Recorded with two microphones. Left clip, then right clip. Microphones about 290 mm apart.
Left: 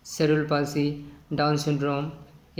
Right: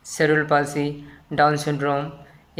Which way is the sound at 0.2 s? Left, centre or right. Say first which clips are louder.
Right 5 dB; right.